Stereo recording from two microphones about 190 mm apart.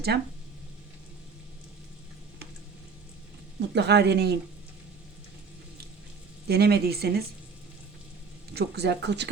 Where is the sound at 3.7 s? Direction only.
65° right (ahead or behind).